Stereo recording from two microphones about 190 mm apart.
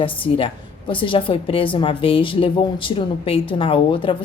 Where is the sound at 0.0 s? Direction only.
30° left (ahead or behind).